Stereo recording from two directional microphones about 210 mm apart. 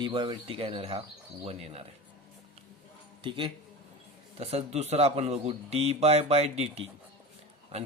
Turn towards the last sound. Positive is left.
turn(degrees=-30)  # may be behind; listen again after turning